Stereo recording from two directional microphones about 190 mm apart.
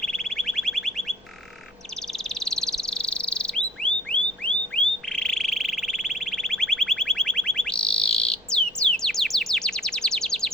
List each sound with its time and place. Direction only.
0.0 s alarm: 5° left (ahead or behind)
2.1 s bird: centre (ahead or behind)
5.0 s frog: 5° left (ahead or behind)